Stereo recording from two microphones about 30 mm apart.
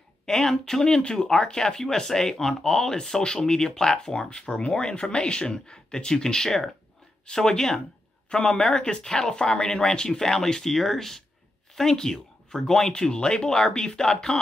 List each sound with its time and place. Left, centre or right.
0.3 s speech: centre
13.1 s speech: left